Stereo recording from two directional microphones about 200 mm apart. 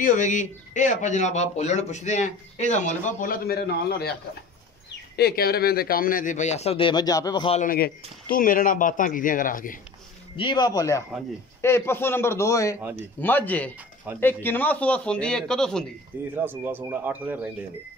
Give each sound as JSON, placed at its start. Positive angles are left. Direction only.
{"t": 0.0, "sound": "speech", "side_deg": 40}
{"t": 5.1, "sound": "speech", "side_deg": 50}
{"t": 7.5, "sound": "speech", "side_deg": 45}
{"t": 10.3, "sound": "a man's voice", "side_deg": 25}
{"t": 16.3, "sound": "speech", "side_deg": -10}